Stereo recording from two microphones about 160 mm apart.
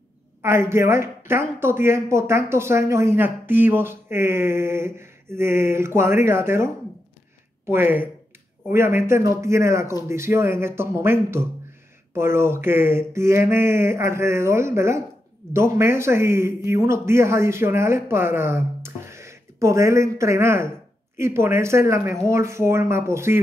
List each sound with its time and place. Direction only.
0.4 s a woman's voice: 15° right (ahead or behind)